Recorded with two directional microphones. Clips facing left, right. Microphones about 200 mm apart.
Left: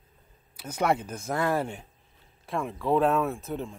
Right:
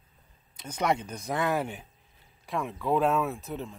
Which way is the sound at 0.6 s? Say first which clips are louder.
Left 2 dB; 5° left (ahead or behind).